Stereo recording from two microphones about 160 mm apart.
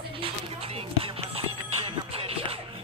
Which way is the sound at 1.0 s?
35° right (ahead or behind).